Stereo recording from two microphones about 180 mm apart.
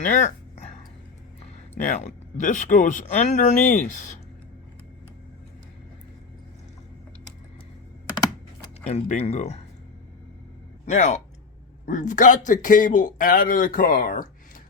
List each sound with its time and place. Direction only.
0.1 s speech: 40° left (ahead or behind)
1.8 s speech: 40° left (ahead or behind)
8.9 s speech: 35° left (ahead or behind)
10.8 s speech: 40° left (ahead or behind)